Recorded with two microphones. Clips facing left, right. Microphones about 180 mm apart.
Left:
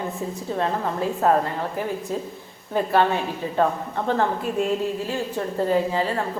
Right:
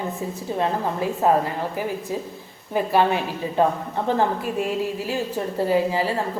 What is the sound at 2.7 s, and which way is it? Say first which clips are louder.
Speech: even; 10° right (ahead or behind).